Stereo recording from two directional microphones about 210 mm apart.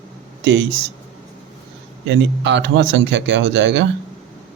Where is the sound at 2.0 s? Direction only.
60° right (ahead or behind).